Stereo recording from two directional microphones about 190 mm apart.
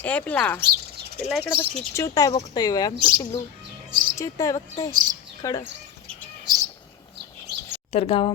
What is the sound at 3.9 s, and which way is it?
Music, 45° right (ahead or behind).